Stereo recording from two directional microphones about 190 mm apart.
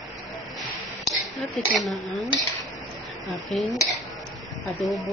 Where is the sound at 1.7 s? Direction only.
Centre (ahead or behind).